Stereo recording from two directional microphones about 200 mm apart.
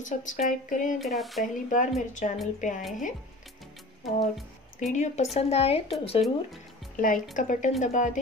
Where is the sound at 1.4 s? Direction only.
40° left (ahead or behind).